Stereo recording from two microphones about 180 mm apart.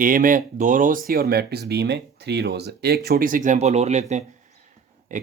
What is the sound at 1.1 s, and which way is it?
Speech, 60° right (ahead or behind).